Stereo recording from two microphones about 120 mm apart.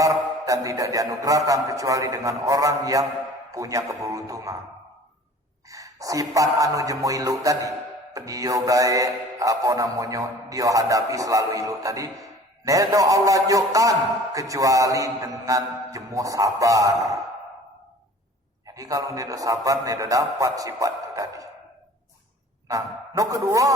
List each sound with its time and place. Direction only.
0.0 s music: 25° right (ahead or behind)
5.6 s music: 30° right (ahead or behind)
18.7 s music: 30° right (ahead or behind)
22.7 s music: 30° right (ahead or behind)